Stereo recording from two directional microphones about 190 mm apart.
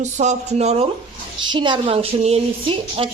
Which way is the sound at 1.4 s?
25° right (ahead or behind).